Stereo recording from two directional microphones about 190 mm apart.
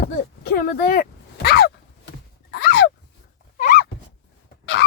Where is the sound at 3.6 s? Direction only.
45° left (ahead or behind).